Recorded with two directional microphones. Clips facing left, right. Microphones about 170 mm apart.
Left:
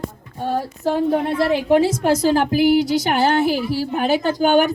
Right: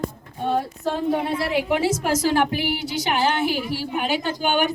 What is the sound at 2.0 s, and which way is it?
Speech, 35° left (ahead or behind).